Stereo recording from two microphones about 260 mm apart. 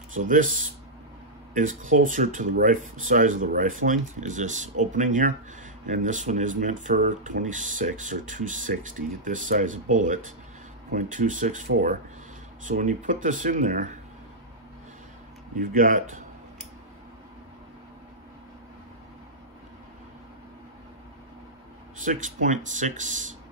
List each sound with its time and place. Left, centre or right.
0.1 s speech: right
15.5 s speech: right
22.0 s speech: right